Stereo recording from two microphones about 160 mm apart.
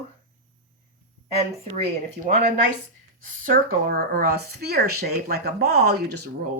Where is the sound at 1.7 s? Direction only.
45° right (ahead or behind).